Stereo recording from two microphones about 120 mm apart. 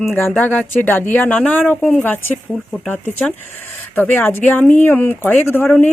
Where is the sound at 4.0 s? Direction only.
15° left (ahead or behind).